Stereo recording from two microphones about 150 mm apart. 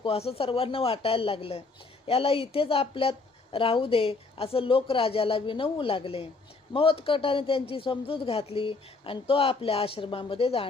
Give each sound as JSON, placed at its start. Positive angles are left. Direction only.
{"t": 0.0, "sound": "a woman's voice", "side_deg": 40}